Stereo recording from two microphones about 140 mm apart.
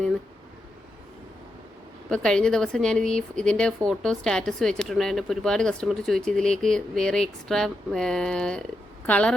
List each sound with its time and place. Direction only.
2.0 s a woman's voice: 5° left (ahead or behind)